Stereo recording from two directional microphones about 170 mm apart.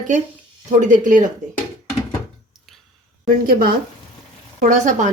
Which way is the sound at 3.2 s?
60° right (ahead or behind).